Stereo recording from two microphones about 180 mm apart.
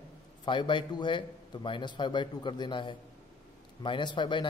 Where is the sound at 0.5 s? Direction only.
25° left (ahead or behind).